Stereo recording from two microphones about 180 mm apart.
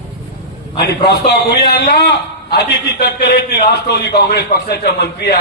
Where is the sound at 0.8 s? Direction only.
60° left (ahead or behind).